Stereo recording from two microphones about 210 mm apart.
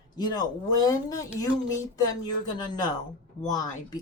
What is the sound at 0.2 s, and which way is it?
Speech, 20° left (ahead or behind).